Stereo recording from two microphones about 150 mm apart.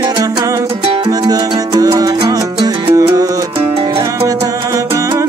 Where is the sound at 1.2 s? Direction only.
25° right (ahead or behind).